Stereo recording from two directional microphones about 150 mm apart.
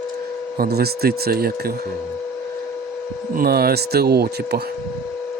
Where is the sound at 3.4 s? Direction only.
90° right.